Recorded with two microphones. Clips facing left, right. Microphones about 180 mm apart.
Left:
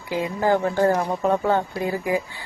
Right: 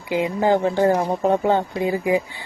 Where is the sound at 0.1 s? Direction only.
20° right (ahead or behind).